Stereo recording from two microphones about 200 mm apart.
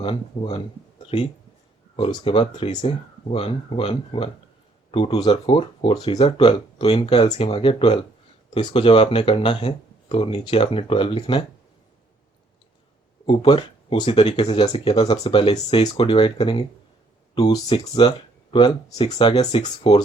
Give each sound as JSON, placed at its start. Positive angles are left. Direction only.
{"t": 0.0, "sound": "speech", "side_deg": 25}
{"t": 13.2, "sound": "speech", "side_deg": 25}